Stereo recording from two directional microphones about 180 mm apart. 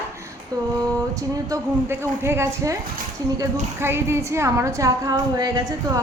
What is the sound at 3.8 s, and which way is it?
Speech, 15° right (ahead or behind).